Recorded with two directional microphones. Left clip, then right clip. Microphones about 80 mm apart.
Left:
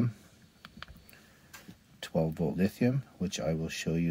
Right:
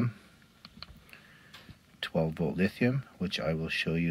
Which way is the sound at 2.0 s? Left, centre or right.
Left.